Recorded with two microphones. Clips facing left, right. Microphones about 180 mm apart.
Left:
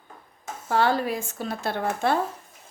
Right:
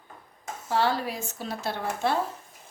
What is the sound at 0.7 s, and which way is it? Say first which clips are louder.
Speech: left 3 dB; 50° left (ahead or behind).